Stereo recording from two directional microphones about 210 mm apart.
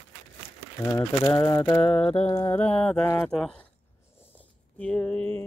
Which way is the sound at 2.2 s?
10° left (ahead or behind).